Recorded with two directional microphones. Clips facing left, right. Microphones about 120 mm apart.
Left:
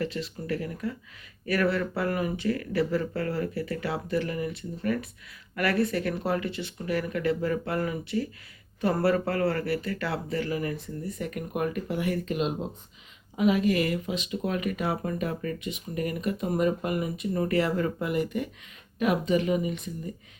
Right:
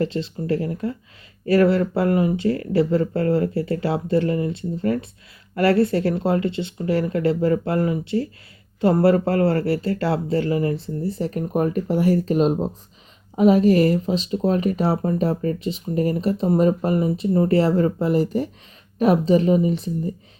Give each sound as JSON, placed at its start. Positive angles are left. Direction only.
{"t": 0.0, "sound": "speech", "side_deg": -30}